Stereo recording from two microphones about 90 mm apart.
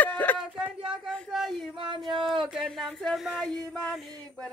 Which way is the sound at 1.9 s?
65° right (ahead or behind).